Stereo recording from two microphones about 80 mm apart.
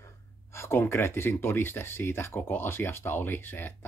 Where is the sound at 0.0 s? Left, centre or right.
Left.